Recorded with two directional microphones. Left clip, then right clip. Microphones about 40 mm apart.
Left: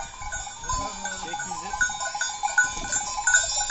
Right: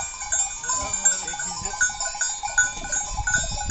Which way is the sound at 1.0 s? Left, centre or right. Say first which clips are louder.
Right 5 dB; centre.